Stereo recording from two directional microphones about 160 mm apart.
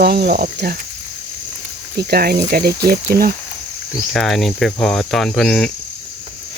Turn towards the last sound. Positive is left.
turn(degrees=0)  # may be behind; listen again after turning